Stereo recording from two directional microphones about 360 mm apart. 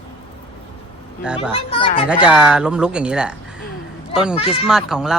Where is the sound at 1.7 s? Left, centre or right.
Centre.